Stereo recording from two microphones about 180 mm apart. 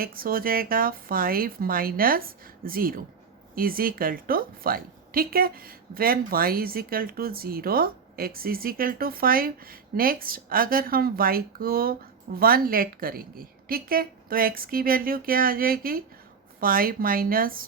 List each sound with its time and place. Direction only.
0.0 s speech: 55° right (ahead or behind)